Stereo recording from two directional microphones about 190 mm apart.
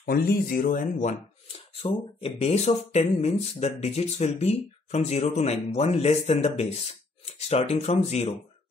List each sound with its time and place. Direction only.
0.0 s speech: 55° left (ahead or behind)
0.7 s speech: 40° left (ahead or behind)